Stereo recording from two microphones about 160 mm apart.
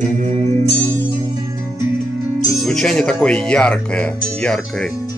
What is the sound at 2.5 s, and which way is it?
Speech, centre (ahead or behind).